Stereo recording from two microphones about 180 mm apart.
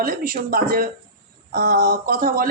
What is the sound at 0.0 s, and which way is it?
Speech, 55° right (ahead or behind).